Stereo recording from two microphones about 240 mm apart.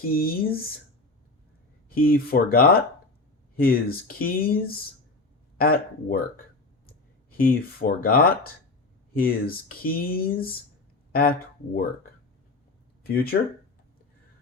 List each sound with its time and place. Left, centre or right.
0.0 s speech: left
1.9 s speech: left